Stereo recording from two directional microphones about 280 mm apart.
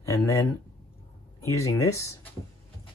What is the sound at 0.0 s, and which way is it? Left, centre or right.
Speech, centre.